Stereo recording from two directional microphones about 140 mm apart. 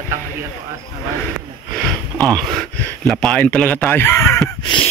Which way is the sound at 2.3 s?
5° left (ahead or behind).